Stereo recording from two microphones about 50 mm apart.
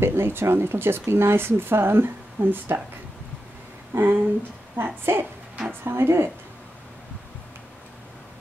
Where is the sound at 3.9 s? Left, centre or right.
Right.